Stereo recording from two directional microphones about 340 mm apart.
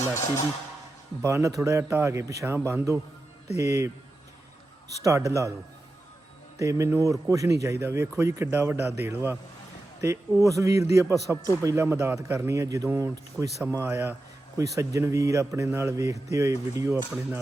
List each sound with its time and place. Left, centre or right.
1.2 s a man's voice: centre
5.0 s a man's voice: centre
6.6 s a man's voice: centre